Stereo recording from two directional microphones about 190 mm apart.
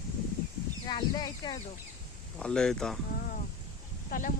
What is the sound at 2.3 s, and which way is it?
Speech, 5° left (ahead or behind).